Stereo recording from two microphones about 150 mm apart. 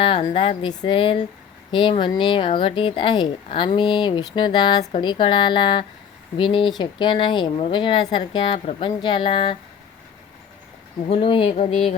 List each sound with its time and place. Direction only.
0.0 s speech: 35° left (ahead or behind)
11.1 s speech: 35° left (ahead or behind)